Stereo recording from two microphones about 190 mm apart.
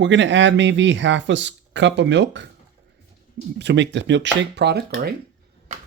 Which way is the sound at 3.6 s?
65° right (ahead or behind).